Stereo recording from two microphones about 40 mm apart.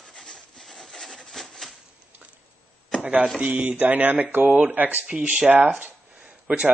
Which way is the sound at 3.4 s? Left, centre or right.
Right.